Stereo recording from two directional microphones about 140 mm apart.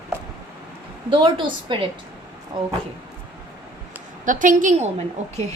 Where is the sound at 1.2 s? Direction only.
35° right (ahead or behind).